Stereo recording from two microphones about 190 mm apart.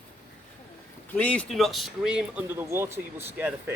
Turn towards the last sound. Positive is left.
turn(degrees=-10)  # may be behind; listen again after turning